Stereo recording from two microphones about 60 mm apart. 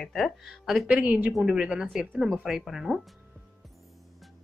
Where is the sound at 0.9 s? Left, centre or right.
Right.